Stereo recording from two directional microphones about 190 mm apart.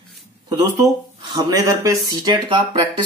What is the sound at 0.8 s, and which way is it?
Speech, 20° right (ahead or behind).